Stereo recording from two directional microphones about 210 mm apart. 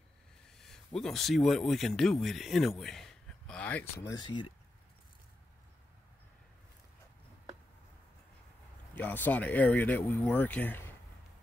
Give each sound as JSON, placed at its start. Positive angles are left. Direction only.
{"t": 0.5, "sound": "speech", "side_deg": 0}
{"t": 2.8, "sound": "a sound", "side_deg": 0}
{"t": 4.1, "sound": "speech", "side_deg": 20}
{"t": 8.9, "sound": "speech", "side_deg": 10}